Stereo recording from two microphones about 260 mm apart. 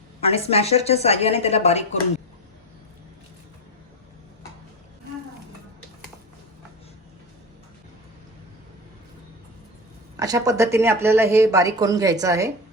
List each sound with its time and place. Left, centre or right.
0.2 s a woman's voice: left
10.2 s speech: centre